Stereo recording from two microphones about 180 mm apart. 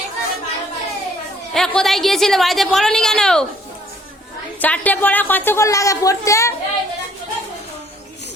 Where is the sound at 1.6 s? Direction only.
5° left (ahead or behind).